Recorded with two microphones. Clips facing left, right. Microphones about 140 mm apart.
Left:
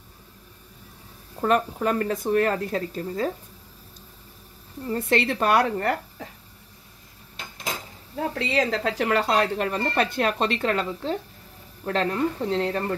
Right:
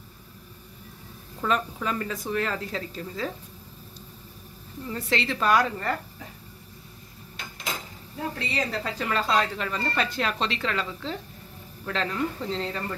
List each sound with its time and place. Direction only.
1.4 s speech: 50° left (ahead or behind)
4.8 s speech: 55° left (ahead or behind)
8.4 s speech: 90° left; by 12.9 s 55° left (ahead or behind)